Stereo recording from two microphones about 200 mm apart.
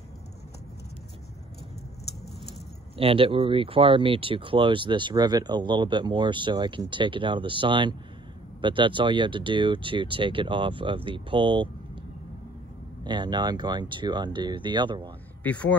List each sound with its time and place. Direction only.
3.0 s speech: 25° right (ahead or behind)
13.0 s speech: 20° right (ahead or behind)
15.4 s speech: 5° left (ahead or behind)